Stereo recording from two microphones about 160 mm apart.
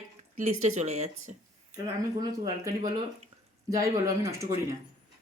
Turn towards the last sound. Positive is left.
turn(degrees=-20)  # may be behind; listen again after turning